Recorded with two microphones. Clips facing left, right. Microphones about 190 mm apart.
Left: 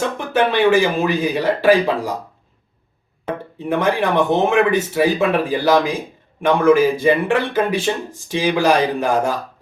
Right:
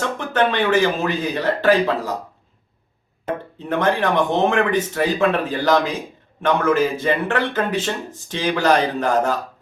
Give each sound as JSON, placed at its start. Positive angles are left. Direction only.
{"t": 0.0, "sound": "speech", "side_deg": 10}
{"t": 3.2, "sound": "speech", "side_deg": 10}